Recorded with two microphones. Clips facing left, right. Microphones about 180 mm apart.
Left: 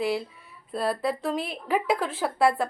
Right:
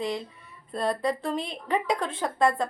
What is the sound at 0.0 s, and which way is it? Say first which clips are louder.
A woman's voice: left 3 dB; 5° left (ahead or behind).